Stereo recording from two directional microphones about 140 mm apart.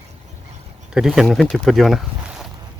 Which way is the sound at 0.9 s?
Centre (ahead or behind).